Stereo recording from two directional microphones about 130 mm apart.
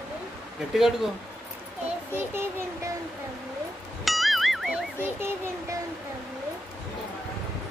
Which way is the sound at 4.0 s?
Centre (ahead or behind).